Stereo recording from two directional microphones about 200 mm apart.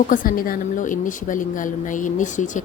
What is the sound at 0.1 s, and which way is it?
A woman's voice, 45° left (ahead or behind).